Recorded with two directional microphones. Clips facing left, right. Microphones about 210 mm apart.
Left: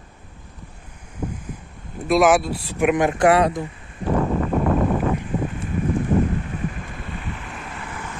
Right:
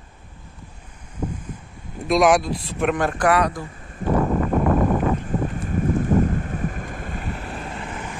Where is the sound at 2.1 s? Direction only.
5° left (ahead or behind); by 3.7 s 25° left (ahead or behind).